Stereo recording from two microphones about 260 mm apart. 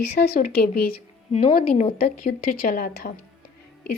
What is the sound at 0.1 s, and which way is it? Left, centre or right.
A woman's voice, left.